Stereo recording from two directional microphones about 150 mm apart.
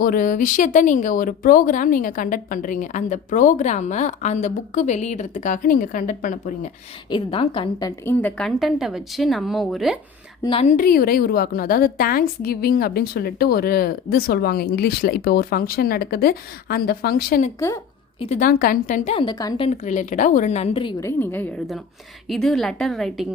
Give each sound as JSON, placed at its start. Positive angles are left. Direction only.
{"t": 0.0, "sound": "speech", "side_deg": 70}
{"t": 7.1, "sound": "a woman's voice", "side_deg": 35}
{"t": 8.1, "sound": "a woman's voice", "side_deg": 10}
{"t": 10.4, "sound": "a woman's voice", "side_deg": 35}
{"t": 10.7, "sound": "a woman's voice", "side_deg": 70}
{"t": 18.3, "sound": "speech", "side_deg": 70}
{"t": 19.1, "sound": "a woman's voice", "side_deg": 30}
{"t": 19.6, "sound": "a woman's voice", "side_deg": 50}
{"t": 21.0, "sound": "a woman's voice", "side_deg": 15}
{"t": 22.3, "sound": "a woman's voice", "side_deg": 0}